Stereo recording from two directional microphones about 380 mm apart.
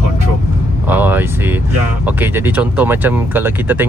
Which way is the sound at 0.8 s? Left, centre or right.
Centre.